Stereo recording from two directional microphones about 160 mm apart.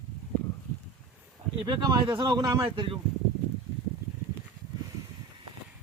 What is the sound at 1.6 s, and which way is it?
Speech, 25° right (ahead or behind).